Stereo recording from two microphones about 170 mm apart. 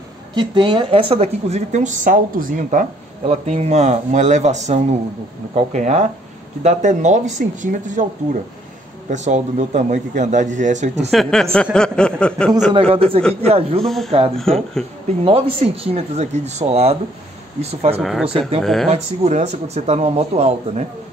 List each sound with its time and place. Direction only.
0.3 s a woman's voice: 30° right (ahead or behind); by 8.1 s 50° right (ahead or behind)
9.1 s a man's voice: 45° right (ahead or behind)
11.1 s speech: centre (ahead or behind)
12.7 s a woman's voice: 35° right (ahead or behind)
13.8 s speech: centre (ahead or behind)
15.2 s a woman's voice: 35° right (ahead or behind)
18.6 s speech: centre (ahead or behind)
18.9 s a woman's voice: 40° right (ahead or behind)